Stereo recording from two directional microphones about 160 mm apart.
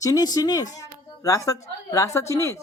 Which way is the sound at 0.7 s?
20° left (ahead or behind).